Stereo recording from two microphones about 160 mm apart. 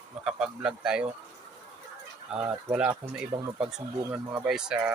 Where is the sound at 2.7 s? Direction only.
5° right (ahead or behind).